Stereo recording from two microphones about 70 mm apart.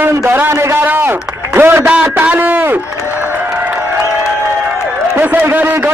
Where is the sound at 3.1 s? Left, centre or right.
Right.